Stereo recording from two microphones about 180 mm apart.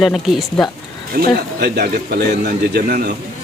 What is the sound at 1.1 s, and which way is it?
A man's voice, 60° right (ahead or behind).